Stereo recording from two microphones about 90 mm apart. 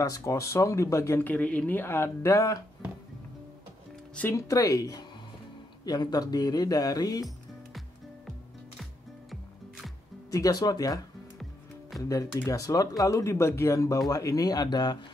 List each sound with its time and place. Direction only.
0.0 s speech: 40° left (ahead or behind)
1.2 s speech: 15° left (ahead or behind); by 2.6 s 35° left (ahead or behind)
4.3 s speech: 35° left (ahead or behind)
9.3 s music: centre (ahead or behind)
10.3 s speech: 40° left (ahead or behind)
12.0 s speech: 35° left (ahead or behind); by 15.0 s 55° left (ahead or behind)